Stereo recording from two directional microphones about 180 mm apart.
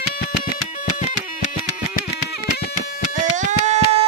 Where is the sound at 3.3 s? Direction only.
40° right (ahead or behind).